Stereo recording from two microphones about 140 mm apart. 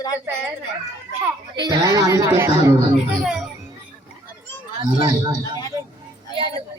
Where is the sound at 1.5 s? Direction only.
30° right (ahead or behind).